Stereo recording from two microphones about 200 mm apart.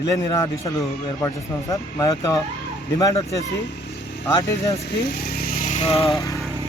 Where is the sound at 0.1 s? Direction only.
15° left (ahead or behind).